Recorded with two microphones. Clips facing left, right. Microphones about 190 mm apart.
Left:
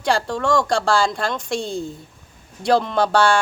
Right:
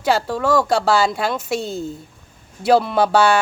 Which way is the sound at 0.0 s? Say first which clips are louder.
Right 2 dB; 5° right (ahead or behind).